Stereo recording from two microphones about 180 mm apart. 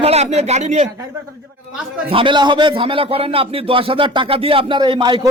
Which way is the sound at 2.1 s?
30° right (ahead or behind).